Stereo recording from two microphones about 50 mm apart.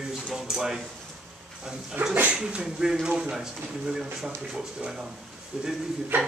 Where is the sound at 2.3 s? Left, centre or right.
Right.